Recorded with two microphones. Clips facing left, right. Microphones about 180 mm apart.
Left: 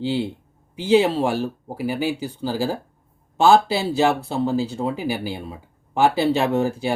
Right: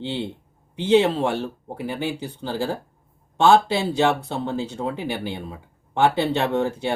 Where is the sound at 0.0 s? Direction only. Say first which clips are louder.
Left 5 dB; 5° left (ahead or behind).